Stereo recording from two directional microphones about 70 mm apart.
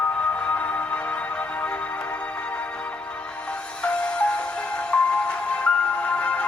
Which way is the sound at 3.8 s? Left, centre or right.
Centre.